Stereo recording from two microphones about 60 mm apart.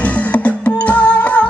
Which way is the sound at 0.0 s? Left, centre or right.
Left.